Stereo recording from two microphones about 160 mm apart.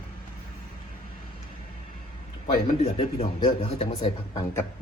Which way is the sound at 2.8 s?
35° left (ahead or behind).